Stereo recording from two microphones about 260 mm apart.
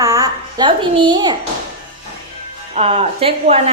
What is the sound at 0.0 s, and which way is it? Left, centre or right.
A woman's voice, centre.